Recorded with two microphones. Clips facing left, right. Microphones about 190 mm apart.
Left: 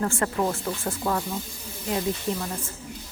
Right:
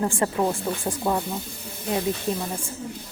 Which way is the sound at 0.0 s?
15° right (ahead or behind).